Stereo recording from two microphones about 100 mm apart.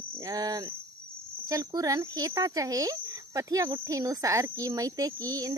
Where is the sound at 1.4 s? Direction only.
40° right (ahead or behind).